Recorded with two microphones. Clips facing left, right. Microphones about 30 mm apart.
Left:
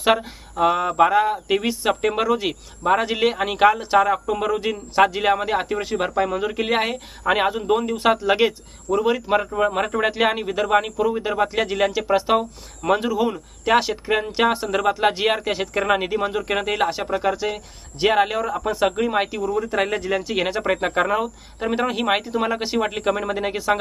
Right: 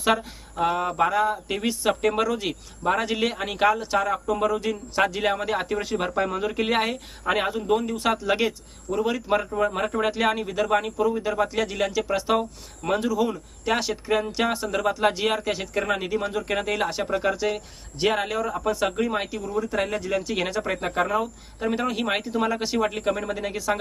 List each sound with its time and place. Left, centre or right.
0.0 s speech: centre